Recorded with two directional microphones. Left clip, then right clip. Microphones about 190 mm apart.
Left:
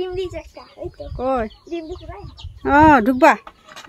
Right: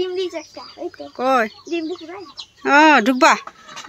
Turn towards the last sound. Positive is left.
turn(degrees=10)  # may be behind; listen again after turning